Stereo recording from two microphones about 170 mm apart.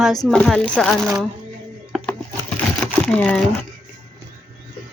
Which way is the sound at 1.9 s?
5° left (ahead or behind).